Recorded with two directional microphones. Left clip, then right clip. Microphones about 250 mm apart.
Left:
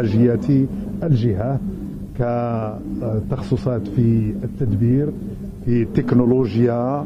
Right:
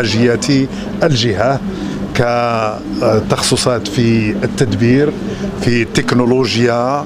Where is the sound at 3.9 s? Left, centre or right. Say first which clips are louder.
Right 7 dB; centre.